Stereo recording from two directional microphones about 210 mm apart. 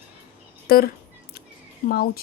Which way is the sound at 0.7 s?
45° left (ahead or behind).